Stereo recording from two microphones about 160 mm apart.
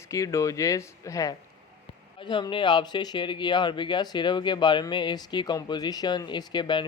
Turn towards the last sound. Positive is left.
turn(degrees=30)  # may be behind; listen again after turning